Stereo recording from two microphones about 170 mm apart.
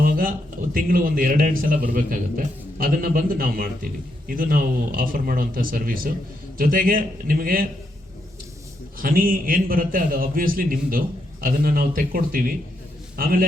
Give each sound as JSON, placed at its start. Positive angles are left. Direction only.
{"t": 0.0, "sound": "a man's voice", "side_deg": -55}
{"t": 9.0, "sound": "a man's voice", "side_deg": -55}